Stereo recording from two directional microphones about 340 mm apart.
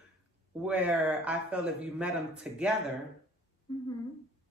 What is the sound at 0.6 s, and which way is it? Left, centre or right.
Speech, centre.